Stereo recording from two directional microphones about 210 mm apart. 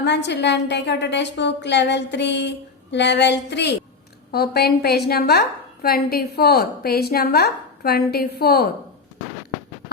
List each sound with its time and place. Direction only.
0.0 s a woman's voice: 55° left (ahead or behind)